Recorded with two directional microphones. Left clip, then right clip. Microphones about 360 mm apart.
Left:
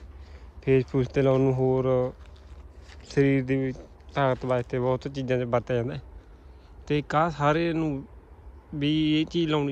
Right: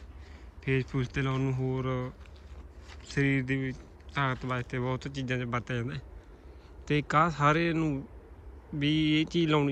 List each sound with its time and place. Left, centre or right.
0.6 s speech: centre